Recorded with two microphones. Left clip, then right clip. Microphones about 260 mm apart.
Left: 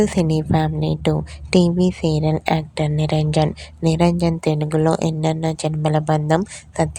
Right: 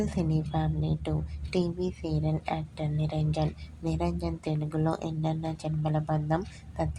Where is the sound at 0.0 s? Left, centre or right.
Left.